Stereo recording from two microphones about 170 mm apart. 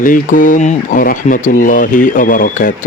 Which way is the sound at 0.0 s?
50° left (ahead or behind).